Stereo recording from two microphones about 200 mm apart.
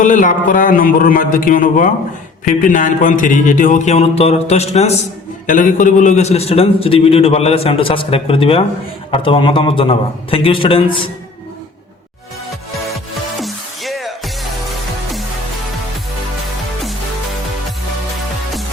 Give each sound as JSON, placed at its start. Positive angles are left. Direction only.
{"t": 0.0, "sound": "a man's voice", "side_deg": 40}
{"t": 13.4, "sound": "music", "side_deg": 0}